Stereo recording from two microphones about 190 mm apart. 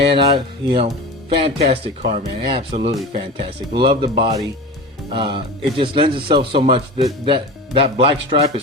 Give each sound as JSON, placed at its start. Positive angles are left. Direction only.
{"t": 0.1, "sound": "a man's voice", "side_deg": -30}